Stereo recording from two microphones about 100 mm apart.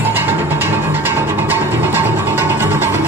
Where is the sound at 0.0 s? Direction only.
20° right (ahead or behind).